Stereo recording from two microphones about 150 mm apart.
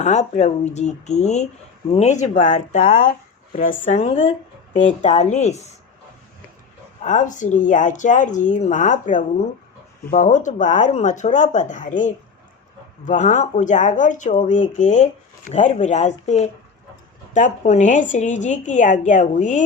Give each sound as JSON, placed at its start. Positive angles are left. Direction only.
{"t": 0.0, "sound": "speech", "side_deg": 50}
{"t": 2.5, "sound": "speech", "side_deg": 60}
{"t": 7.0, "sound": "a woman's voice", "side_deg": 55}